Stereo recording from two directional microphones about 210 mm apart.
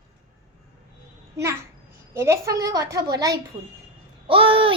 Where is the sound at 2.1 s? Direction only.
15° right (ahead or behind).